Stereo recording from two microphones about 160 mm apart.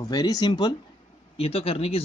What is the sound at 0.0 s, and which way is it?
Speech, 25° left (ahead or behind).